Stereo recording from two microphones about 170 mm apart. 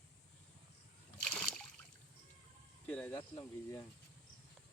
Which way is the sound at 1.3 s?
5° left (ahead or behind).